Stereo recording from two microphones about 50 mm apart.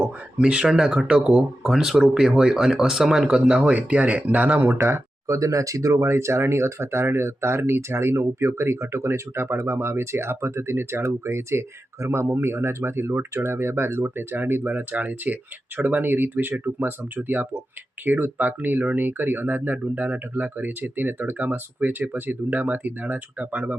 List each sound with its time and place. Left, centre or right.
0.3 s speech: right
4.8 s speech: right